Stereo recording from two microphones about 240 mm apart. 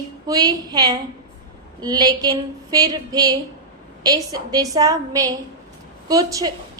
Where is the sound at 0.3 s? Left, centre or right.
Centre.